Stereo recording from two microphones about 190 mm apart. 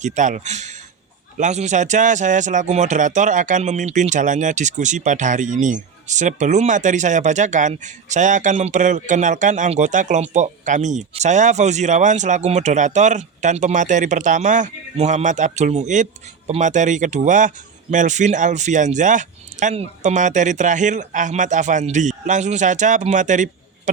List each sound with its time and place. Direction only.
0.0 s speech: 40° right (ahead or behind)